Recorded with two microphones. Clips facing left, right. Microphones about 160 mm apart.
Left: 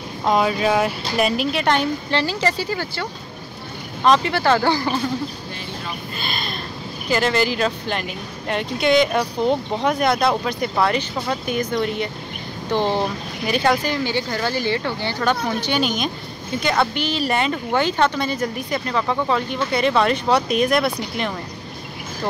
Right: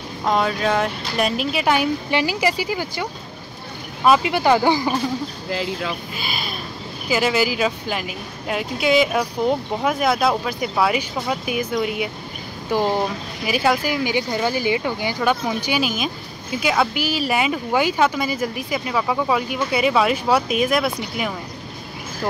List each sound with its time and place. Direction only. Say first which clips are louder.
0.2 s speech: left 2 dB; 5° left (ahead or behind); by 4.9 s 15° right (ahead or behind)
5.5 s speech: right 7 dB; 90° right
6.1 s speech: even; 5° right (ahead or behind)